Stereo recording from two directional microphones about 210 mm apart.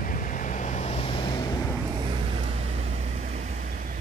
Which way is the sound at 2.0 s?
25° right (ahead or behind).